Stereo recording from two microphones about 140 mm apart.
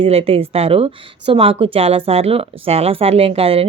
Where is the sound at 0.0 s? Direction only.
45° right (ahead or behind).